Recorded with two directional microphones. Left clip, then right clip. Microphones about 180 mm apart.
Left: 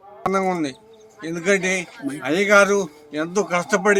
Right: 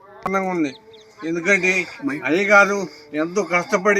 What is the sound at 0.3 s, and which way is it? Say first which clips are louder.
A man's voice: even; 15° left (ahead or behind).